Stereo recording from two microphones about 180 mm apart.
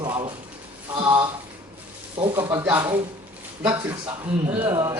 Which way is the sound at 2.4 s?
15° right (ahead or behind).